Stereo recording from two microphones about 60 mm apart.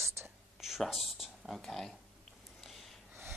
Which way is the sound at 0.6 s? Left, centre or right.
Centre.